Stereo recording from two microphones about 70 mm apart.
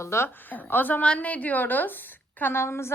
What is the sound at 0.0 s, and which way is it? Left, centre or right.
Speech, left.